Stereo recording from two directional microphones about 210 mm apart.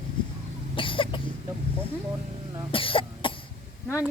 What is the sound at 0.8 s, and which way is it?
Cough, 25° left (ahead or behind).